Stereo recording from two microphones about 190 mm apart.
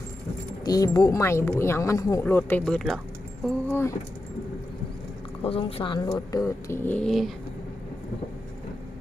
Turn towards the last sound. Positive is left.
turn(degrees=0)  # may be behind; listen again after turning